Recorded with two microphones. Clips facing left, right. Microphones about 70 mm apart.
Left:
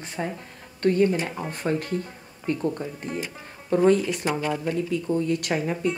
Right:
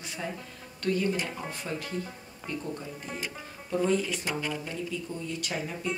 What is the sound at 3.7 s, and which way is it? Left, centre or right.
Speech, left.